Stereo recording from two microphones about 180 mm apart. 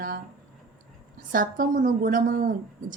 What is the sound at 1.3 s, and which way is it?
A woman's voice, 50° right (ahead or behind).